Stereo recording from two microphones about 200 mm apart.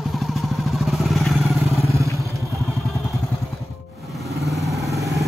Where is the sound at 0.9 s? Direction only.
Centre (ahead or behind).